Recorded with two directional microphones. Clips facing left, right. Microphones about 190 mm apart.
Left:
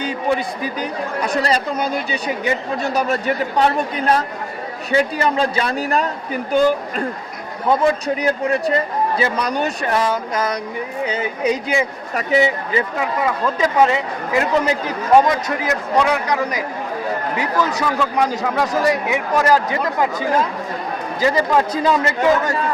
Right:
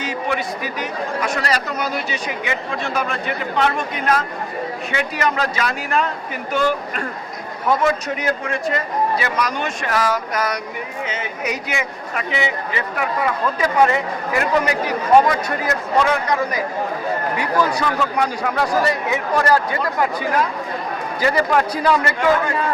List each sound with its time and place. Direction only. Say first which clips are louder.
0.0 s a man's voice: left 3 dB; 30° left (ahead or behind)
13.0 s a man's voice: left 1 dB; 20° left (ahead or behind)
16.0 s a man's voice: even; 15° left (ahead or behind)
18.2 s a man's voice: left 3 dB; 15° left (ahead or behind)